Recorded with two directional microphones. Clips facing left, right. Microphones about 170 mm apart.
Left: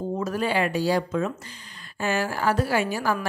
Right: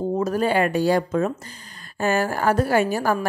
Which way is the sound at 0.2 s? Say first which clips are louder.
Right 4 dB; 45° right (ahead or behind).